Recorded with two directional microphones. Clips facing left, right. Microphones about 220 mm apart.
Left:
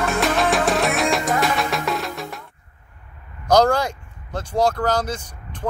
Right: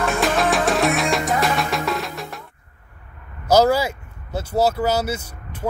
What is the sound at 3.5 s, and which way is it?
Speech, 5° right (ahead or behind).